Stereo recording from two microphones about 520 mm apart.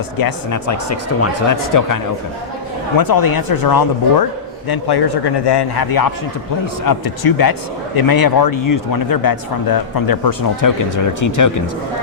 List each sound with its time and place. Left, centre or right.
0.2 s speech: left
3.0 s a man's voice: left